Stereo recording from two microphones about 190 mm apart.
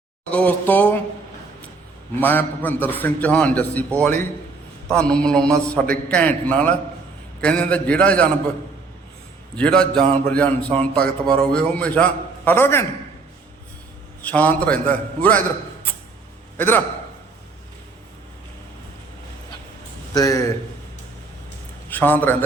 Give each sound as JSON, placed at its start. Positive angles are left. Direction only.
{"t": 0.3, "sound": "a sound", "side_deg": 5}
{"t": 2.2, "sound": "a man's voice", "side_deg": 10}
{"t": 9.6, "sound": "a man's voice", "side_deg": 5}
{"t": 14.2, "sound": "a man's voice", "side_deg": 10}
{"t": 20.1, "sound": "a man's voice", "side_deg": 20}
{"t": 21.8, "sound": "a man's voice", "side_deg": 10}